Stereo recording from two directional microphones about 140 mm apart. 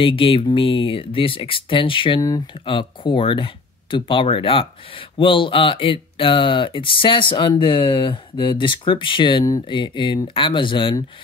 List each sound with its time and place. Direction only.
0.0 s speech: 40° left (ahead or behind)